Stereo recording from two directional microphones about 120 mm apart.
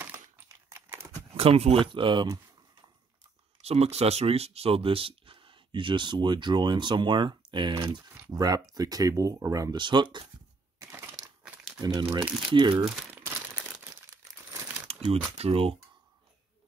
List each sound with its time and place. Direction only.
0.7 s a sound: 25° right (ahead or behind)
1.3 s speech: 55° right (ahead or behind)
1.9 s speech: 45° right (ahead or behind)
3.6 s speech: 60° right (ahead or behind); by 7.8 s 40° right (ahead or behind)
8.3 s speech: 30° right (ahead or behind)
10.8 s typewriter: 20° right (ahead or behind)
11.8 s speech: 35° right (ahead or behind)
13.2 s crumpling: 20° right (ahead or behind)
14.9 s crumpling: 55° right (ahead or behind)
15.3 s speech: 55° right (ahead or behind)